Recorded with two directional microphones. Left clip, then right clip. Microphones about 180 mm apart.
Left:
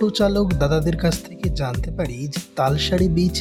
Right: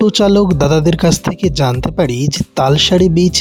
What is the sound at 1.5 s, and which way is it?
Music, 45° right (ahead or behind).